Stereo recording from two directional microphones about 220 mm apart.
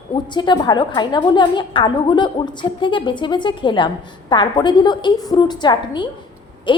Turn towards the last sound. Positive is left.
turn(degrees=20)  # may be behind; listen again after turning